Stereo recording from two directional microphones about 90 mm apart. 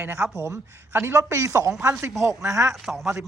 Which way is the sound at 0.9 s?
30° right (ahead or behind).